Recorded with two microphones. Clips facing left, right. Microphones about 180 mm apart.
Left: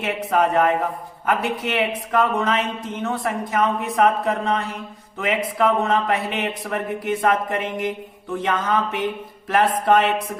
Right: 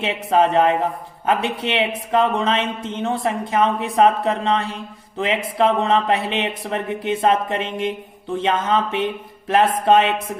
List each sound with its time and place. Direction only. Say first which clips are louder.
0.0 s speech: right 2 dB; 25° right (ahead or behind)